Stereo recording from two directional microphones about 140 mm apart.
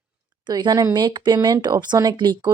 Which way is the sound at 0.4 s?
30° right (ahead or behind).